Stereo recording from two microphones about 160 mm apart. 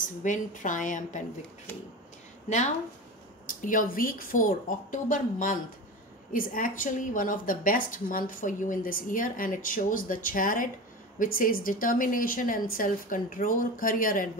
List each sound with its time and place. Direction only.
0.0 s a woman's voice: 55° left (ahead or behind)
3.4 s a woman's voice: 55° left (ahead or behind)